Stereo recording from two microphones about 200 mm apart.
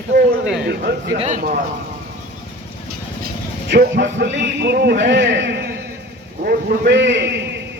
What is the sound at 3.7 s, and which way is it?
A man's voice, 60° right (ahead or behind).